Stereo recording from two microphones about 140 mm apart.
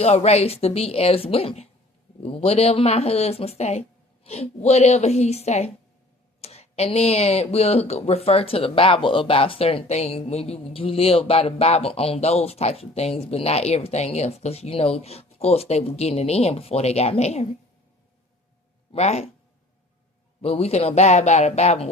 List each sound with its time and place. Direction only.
0.0 s speech: 50° left (ahead or behind)
18.9 s speech: 50° left (ahead or behind)
20.4 s speech: 50° left (ahead or behind)